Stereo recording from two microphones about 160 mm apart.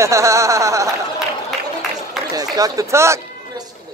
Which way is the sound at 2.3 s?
25° right (ahead or behind).